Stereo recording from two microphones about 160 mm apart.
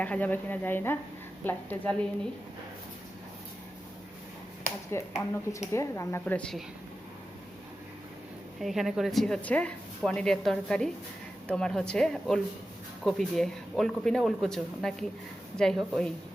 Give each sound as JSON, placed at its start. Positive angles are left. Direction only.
{"t": 0.0, "sound": "a woman's voice", "side_deg": 10}
{"t": 4.9, "sound": "a woman's voice", "side_deg": 20}
{"t": 8.6, "sound": "a woman's voice", "side_deg": 0}